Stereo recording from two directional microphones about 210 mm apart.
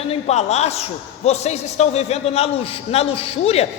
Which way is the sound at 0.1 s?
30° left (ahead or behind).